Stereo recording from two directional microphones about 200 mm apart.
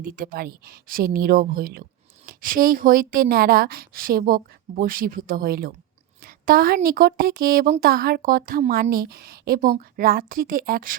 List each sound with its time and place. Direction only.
0.0 s a woman's voice: 45° right (ahead or behind)